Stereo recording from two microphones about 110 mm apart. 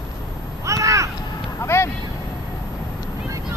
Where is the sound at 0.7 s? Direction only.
30° right (ahead or behind).